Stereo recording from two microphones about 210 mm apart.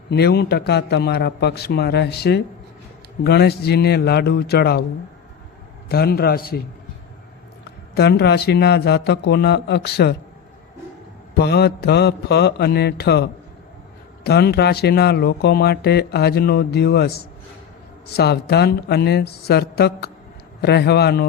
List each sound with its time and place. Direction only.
0.1 s speech: 50° left (ahead or behind)
5.9 s speech: 45° left (ahead or behind)
7.9 s speech: 50° left (ahead or behind)
11.3 s speech: 50° left (ahead or behind)
14.3 s speech: 50° left (ahead or behind)